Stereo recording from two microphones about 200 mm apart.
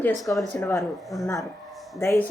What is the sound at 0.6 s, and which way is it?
Speech, 15° left (ahead or behind).